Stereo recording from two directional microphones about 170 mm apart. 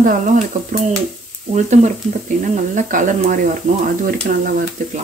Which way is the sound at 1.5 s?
45° right (ahead or behind).